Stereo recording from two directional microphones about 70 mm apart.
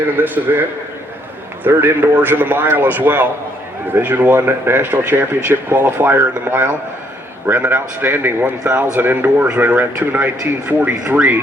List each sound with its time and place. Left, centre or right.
0.2 s a man's voice: right
1.6 s a man's voice: right